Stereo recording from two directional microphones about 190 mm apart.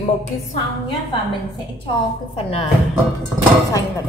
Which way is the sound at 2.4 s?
30° left (ahead or behind).